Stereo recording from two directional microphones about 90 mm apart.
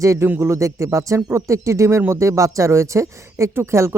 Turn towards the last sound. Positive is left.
turn(degrees=-30)  # may be behind; listen again after turning